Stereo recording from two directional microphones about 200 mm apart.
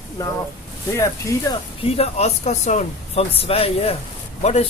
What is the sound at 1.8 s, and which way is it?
Speech, 30° left (ahead or behind).